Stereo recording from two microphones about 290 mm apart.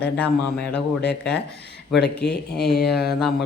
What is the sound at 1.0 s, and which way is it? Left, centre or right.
Speech, left.